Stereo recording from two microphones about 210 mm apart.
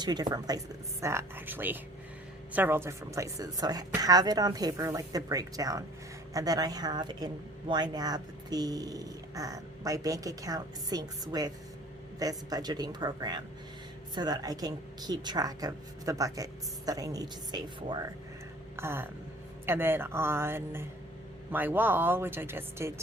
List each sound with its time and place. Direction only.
0.0 s speech: 20° right (ahead or behind)
18.8 s speech: 10° right (ahead or behind)